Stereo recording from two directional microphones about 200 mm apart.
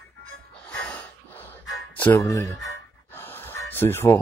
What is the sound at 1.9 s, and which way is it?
Speech, 10° left (ahead or behind).